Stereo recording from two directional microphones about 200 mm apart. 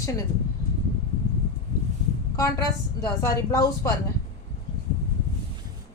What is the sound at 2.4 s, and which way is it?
A woman's voice, 15° left (ahead or behind).